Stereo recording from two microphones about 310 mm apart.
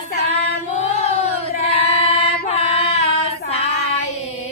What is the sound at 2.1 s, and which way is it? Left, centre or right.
Child singing, centre.